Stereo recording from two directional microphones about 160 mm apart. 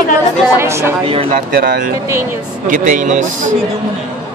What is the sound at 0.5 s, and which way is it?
Speech, 15° right (ahead or behind).